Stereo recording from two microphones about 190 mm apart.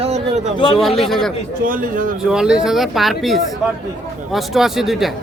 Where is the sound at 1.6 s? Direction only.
45° right (ahead or behind).